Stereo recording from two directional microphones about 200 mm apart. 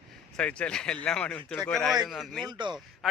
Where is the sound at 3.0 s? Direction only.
Centre (ahead or behind).